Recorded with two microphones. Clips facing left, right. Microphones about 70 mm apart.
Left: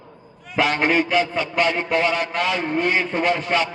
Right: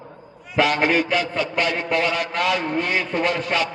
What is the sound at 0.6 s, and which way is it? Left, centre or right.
A man's voice, left.